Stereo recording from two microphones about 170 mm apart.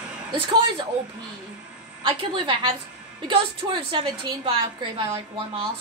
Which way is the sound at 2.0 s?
30° right (ahead or behind).